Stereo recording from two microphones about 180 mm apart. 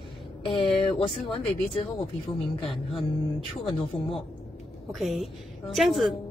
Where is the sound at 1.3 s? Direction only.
30° left (ahead or behind).